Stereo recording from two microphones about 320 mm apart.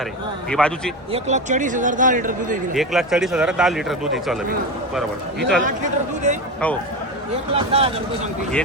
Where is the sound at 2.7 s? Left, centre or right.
Centre.